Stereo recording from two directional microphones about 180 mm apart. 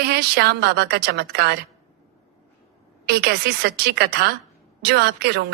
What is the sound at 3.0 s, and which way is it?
A woman's voice, 65° right (ahead or behind).